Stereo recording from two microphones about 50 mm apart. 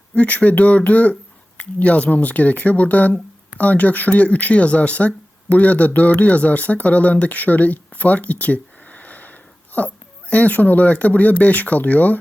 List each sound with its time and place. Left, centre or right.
0.1 s speech: left